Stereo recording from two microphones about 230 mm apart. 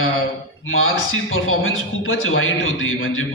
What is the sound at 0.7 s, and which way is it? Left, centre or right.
Speech, left.